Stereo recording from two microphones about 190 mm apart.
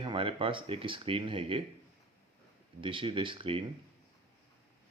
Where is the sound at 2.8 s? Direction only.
25° right (ahead or behind).